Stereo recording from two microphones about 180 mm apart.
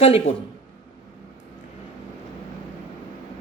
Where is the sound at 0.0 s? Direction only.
35° left (ahead or behind).